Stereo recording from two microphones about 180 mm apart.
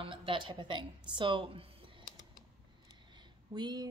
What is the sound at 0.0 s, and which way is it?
Speech, 30° right (ahead or behind).